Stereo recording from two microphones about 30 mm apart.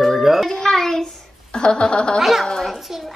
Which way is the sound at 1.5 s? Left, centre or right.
Left.